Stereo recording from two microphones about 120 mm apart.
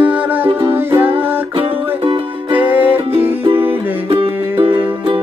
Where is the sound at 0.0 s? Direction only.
15° right (ahead or behind).